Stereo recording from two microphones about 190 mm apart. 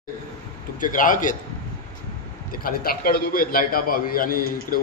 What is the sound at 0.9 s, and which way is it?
Speech, 45° left (ahead or behind).